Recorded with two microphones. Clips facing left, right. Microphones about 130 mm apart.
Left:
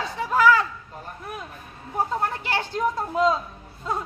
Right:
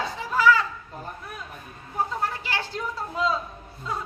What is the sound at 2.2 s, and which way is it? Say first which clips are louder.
Speech: left 3 dB; 50° left (ahead or behind).